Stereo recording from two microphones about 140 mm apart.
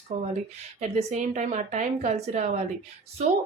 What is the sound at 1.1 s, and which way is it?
A woman's voice, 60° right (ahead or behind).